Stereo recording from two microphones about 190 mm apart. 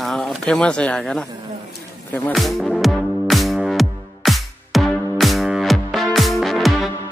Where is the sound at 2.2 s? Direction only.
Centre (ahead or behind).